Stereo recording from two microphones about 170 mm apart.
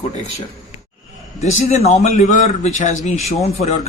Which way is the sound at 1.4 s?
40° left (ahead or behind).